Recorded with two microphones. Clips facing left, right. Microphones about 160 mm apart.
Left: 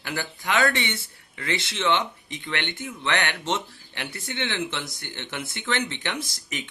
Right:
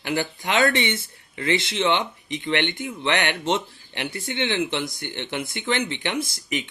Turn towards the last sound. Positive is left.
turn(degrees=-15)  # may be behind; listen again after turning